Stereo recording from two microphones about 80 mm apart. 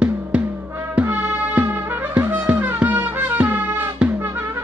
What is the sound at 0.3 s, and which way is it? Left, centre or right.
Music, centre.